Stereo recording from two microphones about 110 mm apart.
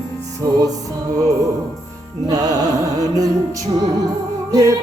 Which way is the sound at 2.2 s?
35° right (ahead or behind).